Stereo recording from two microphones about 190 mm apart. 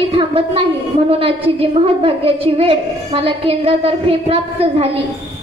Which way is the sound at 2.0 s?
30° right (ahead or behind).